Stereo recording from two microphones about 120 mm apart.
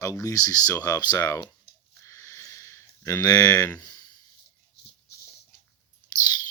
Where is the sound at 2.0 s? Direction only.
25° left (ahead or behind).